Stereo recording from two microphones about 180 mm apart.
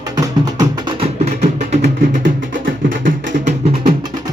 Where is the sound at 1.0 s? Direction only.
35° right (ahead or behind).